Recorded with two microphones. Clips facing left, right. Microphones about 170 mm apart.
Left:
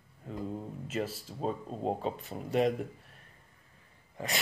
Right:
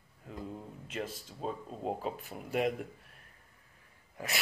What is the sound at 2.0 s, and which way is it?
Speech, centre (ahead or behind).